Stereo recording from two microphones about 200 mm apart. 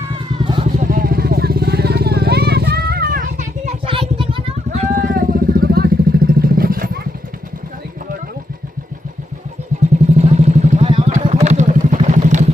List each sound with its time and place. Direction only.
0.3 s vehicle: 20° right (ahead or behind)
0.6 s vehicle: 40° right (ahead or behind)
3.8 s vehicle: 25° right (ahead or behind); by 7.0 s 45° right (ahead or behind)
10.2 s vehicle: 35° right (ahead or behind)